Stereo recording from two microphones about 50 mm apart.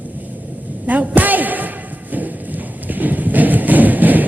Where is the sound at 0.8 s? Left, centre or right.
Right.